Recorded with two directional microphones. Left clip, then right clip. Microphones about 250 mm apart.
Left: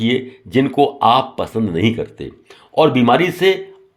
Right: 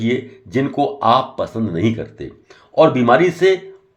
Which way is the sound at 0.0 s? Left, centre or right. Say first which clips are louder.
Left 2 dB; left.